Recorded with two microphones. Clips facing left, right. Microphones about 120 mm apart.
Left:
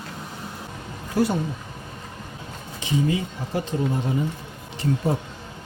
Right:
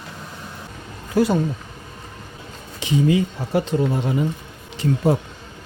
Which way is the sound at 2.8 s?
80° right.